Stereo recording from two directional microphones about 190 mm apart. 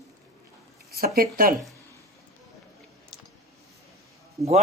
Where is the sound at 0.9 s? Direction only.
55° right (ahead or behind).